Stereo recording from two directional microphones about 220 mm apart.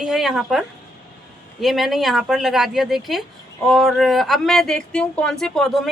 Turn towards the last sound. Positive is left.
turn(degrees=0)  # may be behind; listen again after turning